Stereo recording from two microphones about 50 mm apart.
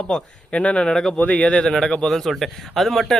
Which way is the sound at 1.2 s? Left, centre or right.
Left.